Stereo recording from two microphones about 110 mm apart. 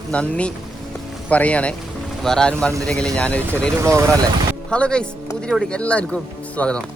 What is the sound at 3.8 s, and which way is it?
Speech, 25° right (ahead or behind).